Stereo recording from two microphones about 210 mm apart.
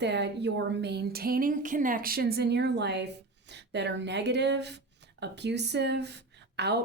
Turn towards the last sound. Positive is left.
turn(degrees=-50)  # may be behind; listen again after turning